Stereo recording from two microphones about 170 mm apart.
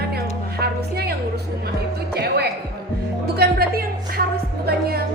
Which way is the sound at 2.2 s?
70° right (ahead or behind).